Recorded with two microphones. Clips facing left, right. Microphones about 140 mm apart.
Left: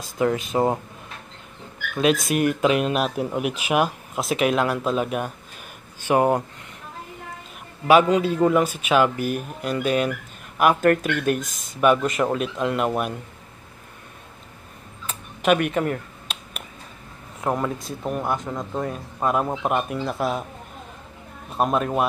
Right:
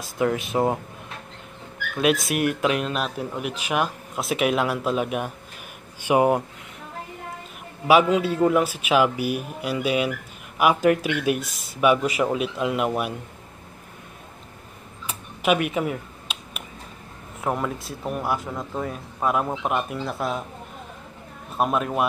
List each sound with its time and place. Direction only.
0.2 s speech: centre (ahead or behind)
2.0 s speech: centre (ahead or behind)
7.8 s speech: 5° right (ahead or behind)
15.0 s a sound: 5° right (ahead or behind)
17.4 s speech: centre (ahead or behind)
21.5 s speech: centre (ahead or behind)